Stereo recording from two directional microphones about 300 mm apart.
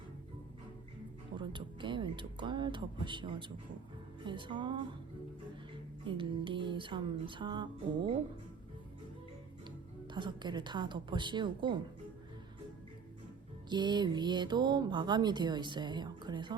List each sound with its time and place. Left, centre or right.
1.4 s speech: centre
6.1 s speech: centre
10.1 s speech: centre
13.7 s speech: centre